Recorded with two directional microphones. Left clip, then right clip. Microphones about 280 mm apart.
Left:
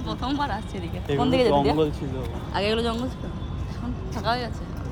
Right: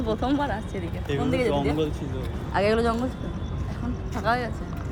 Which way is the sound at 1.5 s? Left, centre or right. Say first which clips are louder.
Left 4 dB; left.